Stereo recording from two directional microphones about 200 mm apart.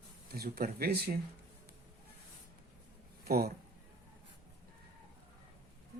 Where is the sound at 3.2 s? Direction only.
50° right (ahead or behind).